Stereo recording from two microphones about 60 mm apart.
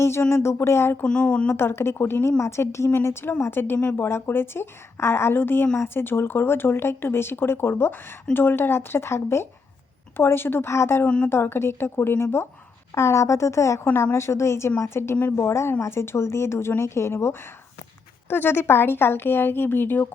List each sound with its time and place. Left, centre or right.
0.0 s speech: left
1.0 s speech: centre
1.5 s speech: left
11.0 s a woman's voice: left
11.3 s speech: left
12.9 s speech: left
18.3 s speech: left